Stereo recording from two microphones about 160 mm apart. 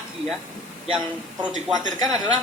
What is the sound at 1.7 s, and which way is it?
Speech, 25° left (ahead or behind).